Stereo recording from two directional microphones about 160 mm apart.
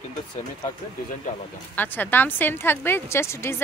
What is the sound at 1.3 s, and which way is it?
Speech, 40° left (ahead or behind).